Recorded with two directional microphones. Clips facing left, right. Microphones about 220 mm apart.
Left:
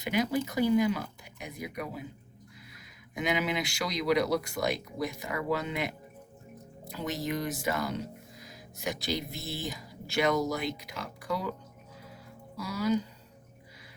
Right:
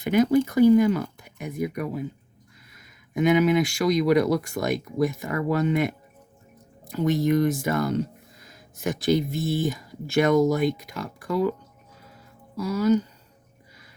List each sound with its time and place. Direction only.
0.0 s speech: 50° right (ahead or behind)
6.9 s speech: 50° right (ahead or behind)
12.6 s speech: 45° right (ahead or behind)